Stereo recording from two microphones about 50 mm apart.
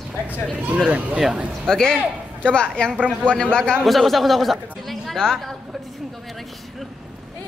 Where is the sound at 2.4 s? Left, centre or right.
Centre.